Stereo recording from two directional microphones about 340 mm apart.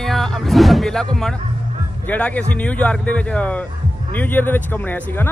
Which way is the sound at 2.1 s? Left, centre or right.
Centre.